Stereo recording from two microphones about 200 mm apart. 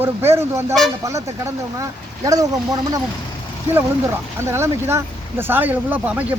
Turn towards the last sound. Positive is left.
turn(degrees=-10)  # may be behind; listen again after turning